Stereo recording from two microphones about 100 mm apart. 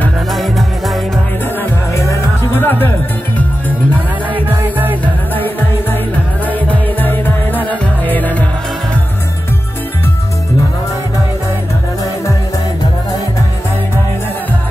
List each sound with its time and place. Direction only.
0.3 s music: centre (ahead or behind)
2.0 s music: 25° left (ahead or behind)
5.0 s music: 20° left (ahead or behind)